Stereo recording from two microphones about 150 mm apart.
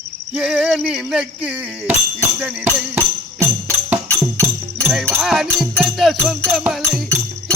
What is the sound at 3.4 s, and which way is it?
Music, 15° right (ahead or behind).